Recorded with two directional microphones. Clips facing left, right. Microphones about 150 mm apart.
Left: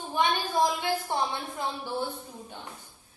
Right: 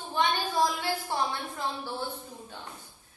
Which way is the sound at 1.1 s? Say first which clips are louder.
Even; 20° left (ahead or behind).